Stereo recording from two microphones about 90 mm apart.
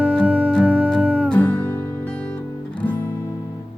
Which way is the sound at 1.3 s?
20° left (ahead or behind).